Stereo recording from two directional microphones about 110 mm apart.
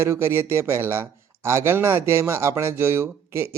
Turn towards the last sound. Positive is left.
turn(degrees=-20)  # may be behind; listen again after turning